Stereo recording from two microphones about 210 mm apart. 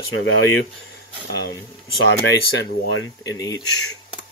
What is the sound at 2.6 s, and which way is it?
Speech, 55° left (ahead or behind).